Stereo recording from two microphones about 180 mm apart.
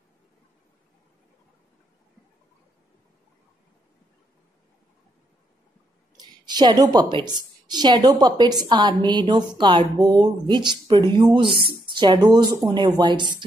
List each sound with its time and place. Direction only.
6.1 s a woman's voice: 25° right (ahead or behind)